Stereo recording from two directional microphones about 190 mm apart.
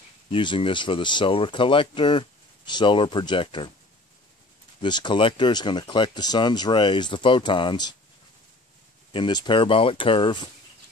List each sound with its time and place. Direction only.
0.3 s speech: 25° left (ahead or behind)
4.8 s speech: 25° left (ahead or behind)
9.1 s speech: 25° left (ahead or behind)